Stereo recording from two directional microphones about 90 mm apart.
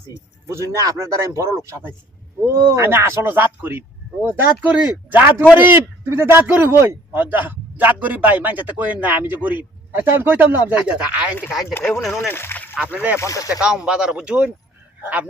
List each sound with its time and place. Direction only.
0.4 s a man's voice: 35° right (ahead or behind); by 11.3 s 15° right (ahead or behind)
11.7 s speech: 25° left (ahead or behind)
12.9 s speech: 15° right (ahead or behind)
13.1 s speech: 35° left (ahead or behind)
13.6 s speech: 10° right (ahead or behind)